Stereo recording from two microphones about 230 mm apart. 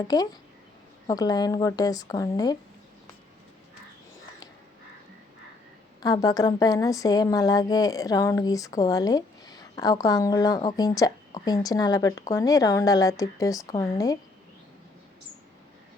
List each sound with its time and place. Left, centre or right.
0.1 s speech: centre
6.0 s speech: centre